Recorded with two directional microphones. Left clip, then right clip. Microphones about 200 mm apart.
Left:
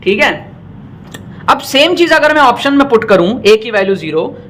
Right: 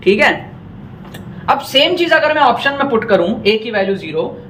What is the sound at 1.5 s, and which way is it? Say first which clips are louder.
Speech: left 2 dB; 50° left (ahead or behind).